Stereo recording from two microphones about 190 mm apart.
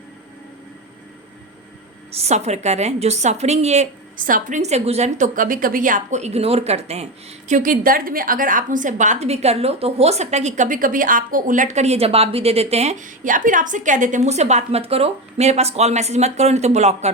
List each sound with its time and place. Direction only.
2.1 s a woman's voice: 35° right (ahead or behind)